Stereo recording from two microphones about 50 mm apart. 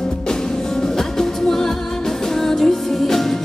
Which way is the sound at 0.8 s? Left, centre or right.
Centre.